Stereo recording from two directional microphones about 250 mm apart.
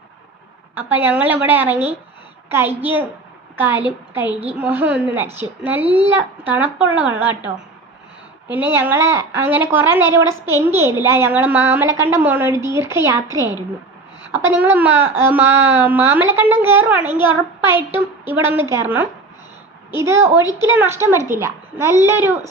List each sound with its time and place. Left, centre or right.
0.8 s a woman's voice: centre
8.4 s a woman's voice: centre
13.3 s a woman's voice: centre
14.4 s a woman's voice: centre
17.2 s a woman's voice: centre
18.4 s a woman's voice: centre
20.1 s a woman's voice: centre